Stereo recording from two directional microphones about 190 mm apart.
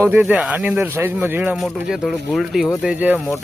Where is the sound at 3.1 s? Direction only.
10° left (ahead or behind).